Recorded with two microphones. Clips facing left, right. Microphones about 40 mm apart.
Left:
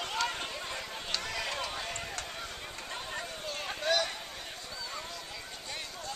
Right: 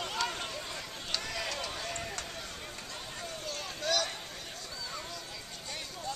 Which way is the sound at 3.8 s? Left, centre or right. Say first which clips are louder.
Left 2 dB; centre.